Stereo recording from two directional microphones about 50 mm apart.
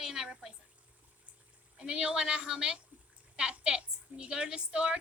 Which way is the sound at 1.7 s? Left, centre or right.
Centre.